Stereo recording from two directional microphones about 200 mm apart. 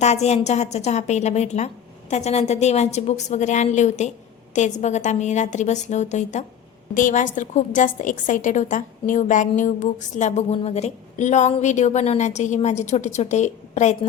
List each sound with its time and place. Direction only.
0.0 s a woman's voice: 35° left (ahead or behind)